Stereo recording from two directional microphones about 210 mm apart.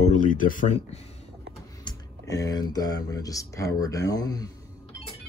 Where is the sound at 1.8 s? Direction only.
20° left (ahead or behind).